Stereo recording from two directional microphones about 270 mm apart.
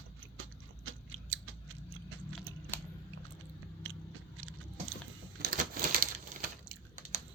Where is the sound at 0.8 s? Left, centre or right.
Right.